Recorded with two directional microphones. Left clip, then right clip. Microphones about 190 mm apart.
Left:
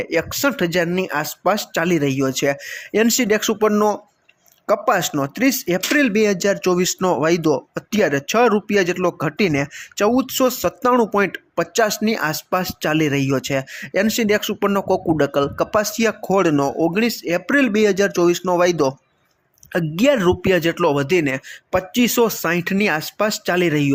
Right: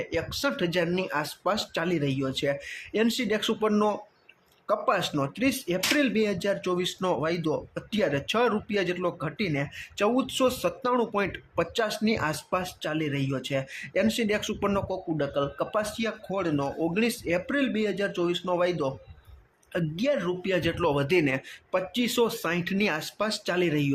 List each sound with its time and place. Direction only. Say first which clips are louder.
0.0 s speech: left 9 dB; 30° left (ahead or behind)
14.8 s speech: left 12 dB; 40° left (ahead or behind)
20.0 s speech: left 12 dB; 40° left (ahead or behind)